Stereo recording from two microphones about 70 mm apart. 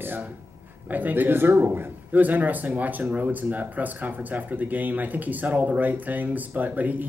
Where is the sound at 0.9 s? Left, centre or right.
Right.